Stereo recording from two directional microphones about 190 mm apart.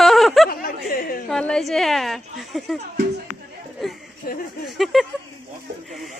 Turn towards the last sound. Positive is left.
turn(degrees=0)  # may be behind; listen again after turning